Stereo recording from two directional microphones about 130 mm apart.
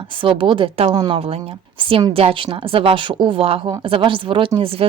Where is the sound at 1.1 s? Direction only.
50° right (ahead or behind).